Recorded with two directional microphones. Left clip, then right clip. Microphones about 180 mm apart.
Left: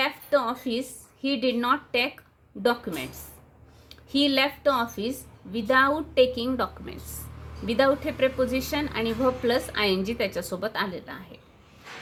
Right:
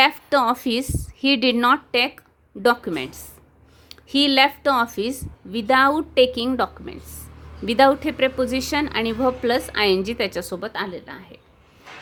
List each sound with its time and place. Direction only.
0.0 s a woman's voice: 50° right (ahead or behind)
6.8 s a woman's voice: 25° right (ahead or behind)
7.6 s a woman's voice: 40° right (ahead or behind); by 11.3 s 25° right (ahead or behind)